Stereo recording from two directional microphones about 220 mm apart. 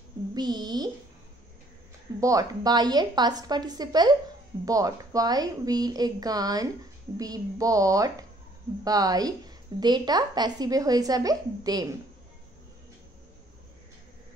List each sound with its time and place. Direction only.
0.3 s a woman's voice: 20° right (ahead or behind)
2.1 s a woman's voice: 15° right (ahead or behind)